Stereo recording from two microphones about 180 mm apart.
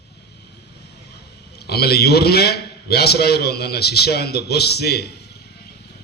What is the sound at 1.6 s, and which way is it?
A man's voice, 60° left (ahead or behind).